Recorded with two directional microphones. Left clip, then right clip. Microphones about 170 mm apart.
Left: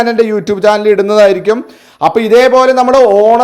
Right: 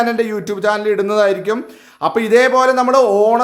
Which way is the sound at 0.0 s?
30° left (ahead or behind).